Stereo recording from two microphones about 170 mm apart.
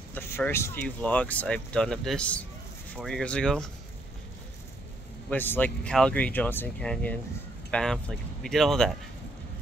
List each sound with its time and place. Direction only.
0.1 s a sound: 15° left (ahead or behind)
0.5 s speech: 15° left (ahead or behind)
5.3 s speech: 10° left (ahead or behind)